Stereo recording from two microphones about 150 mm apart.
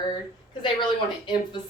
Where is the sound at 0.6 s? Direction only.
30° left (ahead or behind).